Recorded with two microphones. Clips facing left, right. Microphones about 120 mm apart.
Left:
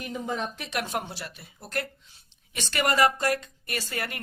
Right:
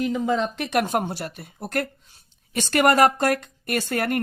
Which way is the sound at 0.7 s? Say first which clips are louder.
Right 9 dB; 50° right (ahead or behind).